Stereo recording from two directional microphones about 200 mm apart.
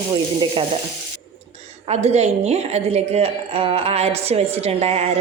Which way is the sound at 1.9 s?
30° right (ahead or behind).